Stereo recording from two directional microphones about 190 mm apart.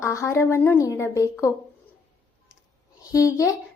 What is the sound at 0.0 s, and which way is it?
Speech, 15° left (ahead or behind).